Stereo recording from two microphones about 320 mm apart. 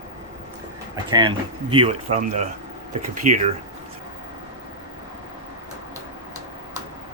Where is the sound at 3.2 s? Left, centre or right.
Right.